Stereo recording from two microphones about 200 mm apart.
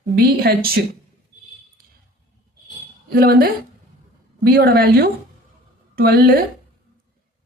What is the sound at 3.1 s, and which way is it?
Speech, 50° right (ahead or behind).